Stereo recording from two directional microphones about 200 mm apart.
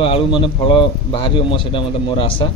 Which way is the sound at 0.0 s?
25° left (ahead or behind).